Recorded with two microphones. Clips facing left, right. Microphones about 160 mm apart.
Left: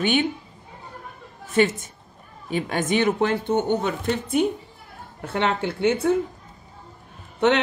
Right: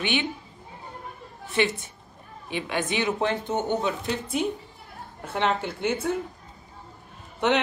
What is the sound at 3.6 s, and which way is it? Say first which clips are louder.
Speech: left 3 dB; 55° left (ahead or behind).